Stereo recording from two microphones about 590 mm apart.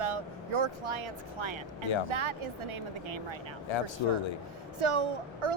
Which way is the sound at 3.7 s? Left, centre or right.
Left.